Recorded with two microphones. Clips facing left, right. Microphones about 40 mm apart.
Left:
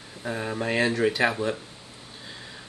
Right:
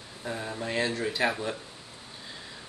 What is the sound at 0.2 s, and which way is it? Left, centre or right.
Speech, left.